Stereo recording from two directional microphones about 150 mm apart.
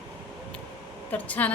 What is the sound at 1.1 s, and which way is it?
Speech, 10° left (ahead or behind).